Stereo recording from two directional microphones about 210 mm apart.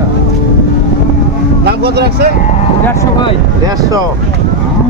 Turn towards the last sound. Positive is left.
turn(degrees=-15)  # may be behind; listen again after turning